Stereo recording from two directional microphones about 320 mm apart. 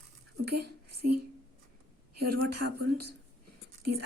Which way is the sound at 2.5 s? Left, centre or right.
Right.